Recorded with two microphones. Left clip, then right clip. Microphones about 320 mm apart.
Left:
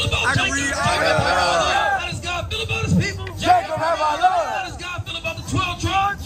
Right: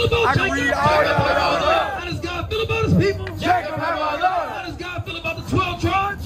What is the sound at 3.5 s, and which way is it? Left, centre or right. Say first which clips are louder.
Music: left 3 dB; centre.